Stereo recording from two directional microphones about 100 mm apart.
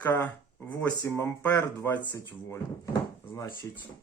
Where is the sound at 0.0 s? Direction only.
20° left (ahead or behind).